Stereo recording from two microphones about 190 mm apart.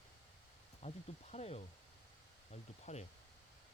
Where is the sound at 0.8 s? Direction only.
35° left (ahead or behind).